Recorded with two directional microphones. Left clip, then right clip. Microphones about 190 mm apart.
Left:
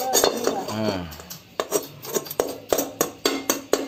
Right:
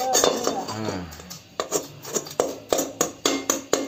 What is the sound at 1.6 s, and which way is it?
Music, 20° left (ahead or behind).